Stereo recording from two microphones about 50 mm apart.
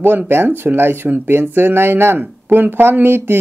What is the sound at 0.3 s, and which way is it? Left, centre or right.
Speech, right.